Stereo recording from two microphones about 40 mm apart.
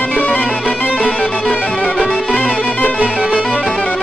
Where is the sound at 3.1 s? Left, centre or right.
Right.